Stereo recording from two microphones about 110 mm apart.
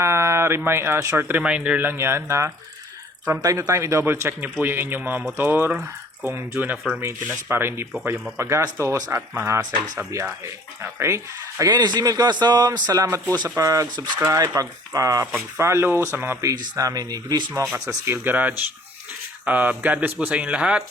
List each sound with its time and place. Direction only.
0.0 s speech: 25° right (ahead or behind)
10.4 s speech: 20° right (ahead or behind)
11.7 s a man's voice: 40° right (ahead or behind)
14.3 s a man's voice: 30° right (ahead or behind); by 20.8 s 10° right (ahead or behind)